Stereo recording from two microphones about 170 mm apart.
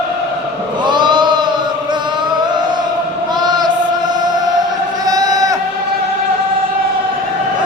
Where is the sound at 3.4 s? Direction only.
25° right (ahead or behind).